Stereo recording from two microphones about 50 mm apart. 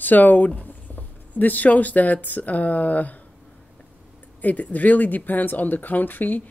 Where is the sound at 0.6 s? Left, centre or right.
Left.